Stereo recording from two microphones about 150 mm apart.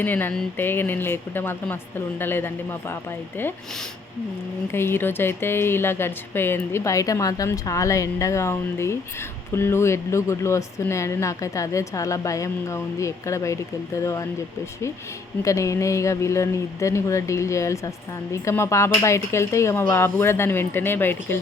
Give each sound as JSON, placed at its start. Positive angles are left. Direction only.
{"t": 0.0, "sound": "speech", "side_deg": 10}
{"t": 4.7, "sound": "speech", "side_deg": 15}
{"t": 15.4, "sound": "speech", "side_deg": 20}